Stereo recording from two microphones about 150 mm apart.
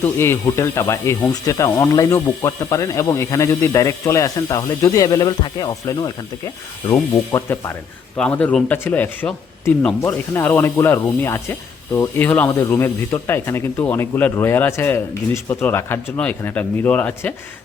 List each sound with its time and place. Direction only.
0.0 s speech: 15° left (ahead or behind)
7.3 s speech: 20° left (ahead or behind)
8.1 s speech: 10° left (ahead or behind)